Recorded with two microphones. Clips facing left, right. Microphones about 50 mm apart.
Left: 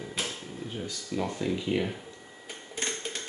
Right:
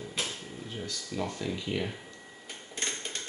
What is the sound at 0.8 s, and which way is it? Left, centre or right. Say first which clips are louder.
Speech: left 2 dB; centre.